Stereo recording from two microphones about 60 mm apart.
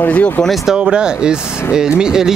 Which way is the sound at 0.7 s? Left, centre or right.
Centre.